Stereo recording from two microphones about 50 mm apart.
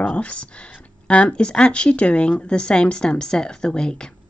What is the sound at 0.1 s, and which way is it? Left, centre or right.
A woman's voice, left.